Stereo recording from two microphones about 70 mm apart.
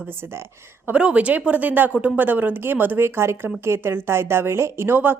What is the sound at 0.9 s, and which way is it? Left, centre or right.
A woman's voice, centre.